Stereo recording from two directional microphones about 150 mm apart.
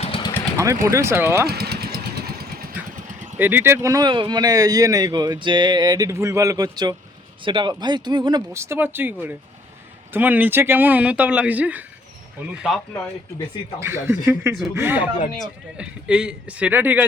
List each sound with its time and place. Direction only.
0.0 s vehicle: 35° left (ahead or behind)
0.5 s a man's voice: 20° right (ahead or behind)
1.5 s vehicle: 90° right
3.3 s a man's voice: 15° right (ahead or behind); by 8.4 s 30° right (ahead or behind)
8.5 s speech: 15° right (ahead or behind)
13.8 s speech: 15° right (ahead or behind)